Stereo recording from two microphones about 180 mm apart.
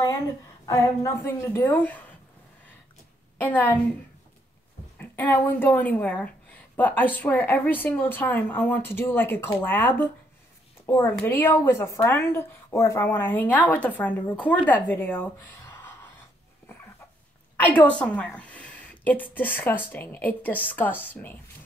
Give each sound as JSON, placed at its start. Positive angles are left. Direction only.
{"t": 0.7, "sound": "a woman's voice", "side_deg": 15}
{"t": 3.3, "sound": "a woman's voice", "side_deg": 10}
{"t": 4.9, "sound": "a woman's voice", "side_deg": 10}
{"t": 17.6, "sound": "a woman's voice", "side_deg": 10}